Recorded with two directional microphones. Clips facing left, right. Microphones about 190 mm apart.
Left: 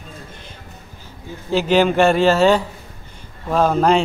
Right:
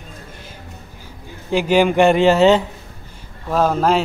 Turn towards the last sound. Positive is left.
turn(degrees=-5)  # may be behind; listen again after turning